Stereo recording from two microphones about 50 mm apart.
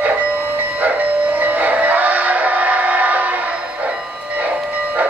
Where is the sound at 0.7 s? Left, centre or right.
Right.